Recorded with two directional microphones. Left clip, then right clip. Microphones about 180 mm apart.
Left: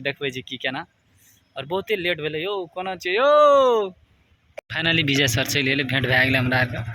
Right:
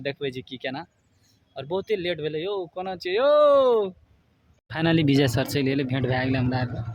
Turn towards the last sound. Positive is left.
turn(degrees=-10)  # may be behind; listen again after turning